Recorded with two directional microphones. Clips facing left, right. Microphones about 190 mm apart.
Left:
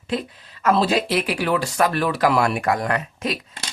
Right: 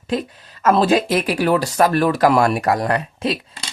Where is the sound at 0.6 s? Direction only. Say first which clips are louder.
Right 4 dB; 50° right (ahead or behind).